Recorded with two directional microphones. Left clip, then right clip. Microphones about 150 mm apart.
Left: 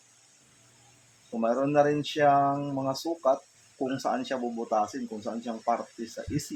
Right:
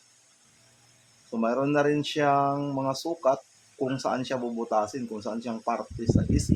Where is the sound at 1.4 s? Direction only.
40° right (ahead or behind).